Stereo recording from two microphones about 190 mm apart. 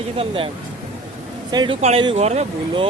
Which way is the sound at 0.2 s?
30° right (ahead or behind).